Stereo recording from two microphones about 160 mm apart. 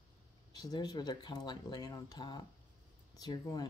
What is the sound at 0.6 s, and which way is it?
Speech, 25° left (ahead or behind).